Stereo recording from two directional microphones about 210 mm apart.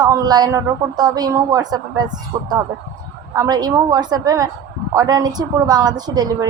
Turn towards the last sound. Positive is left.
turn(degrees=-20)  # may be behind; listen again after turning